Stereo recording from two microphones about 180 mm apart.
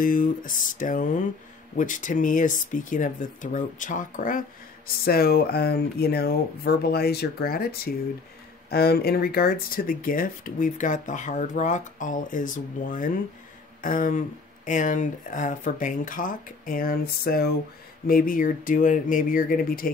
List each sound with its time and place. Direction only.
0.0 s speech: 50° left (ahead or behind)